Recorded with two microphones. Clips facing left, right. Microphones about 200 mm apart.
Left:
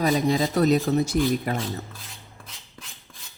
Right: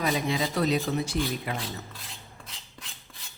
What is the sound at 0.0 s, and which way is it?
Speech, 40° left (ahead or behind).